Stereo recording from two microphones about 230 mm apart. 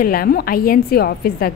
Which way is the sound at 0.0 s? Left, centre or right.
Left.